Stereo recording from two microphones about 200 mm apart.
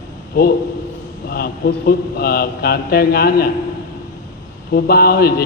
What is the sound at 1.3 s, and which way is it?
A man's voice, 50° left (ahead or behind).